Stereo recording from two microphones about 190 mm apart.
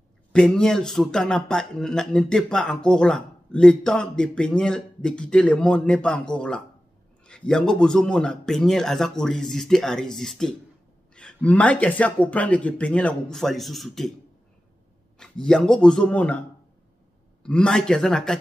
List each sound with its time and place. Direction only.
0.3 s speech: 5° left (ahead or behind)
15.1 s speech: 5° left (ahead or behind)
17.4 s speech: 5° left (ahead or behind)